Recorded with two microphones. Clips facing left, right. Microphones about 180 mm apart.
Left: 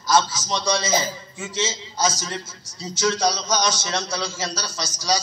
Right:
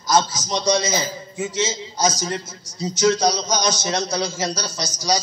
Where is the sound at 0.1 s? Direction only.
20° right (ahead or behind).